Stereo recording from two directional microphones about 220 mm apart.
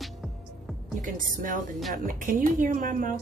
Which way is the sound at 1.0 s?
40° right (ahead or behind).